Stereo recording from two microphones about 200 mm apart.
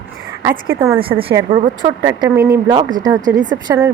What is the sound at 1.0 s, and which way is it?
Speech, 25° right (ahead or behind).